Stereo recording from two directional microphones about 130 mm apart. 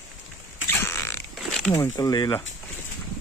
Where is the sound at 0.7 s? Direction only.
20° left (ahead or behind).